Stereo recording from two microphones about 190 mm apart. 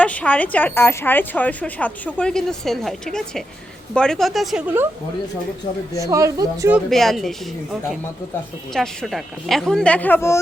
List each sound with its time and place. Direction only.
0.0 s a woman's voice: 5° left (ahead or behind); by 4.9 s 10° right (ahead or behind)
6.0 s speech: 15° right (ahead or behind)
6.7 s a woman's voice: centre (ahead or behind)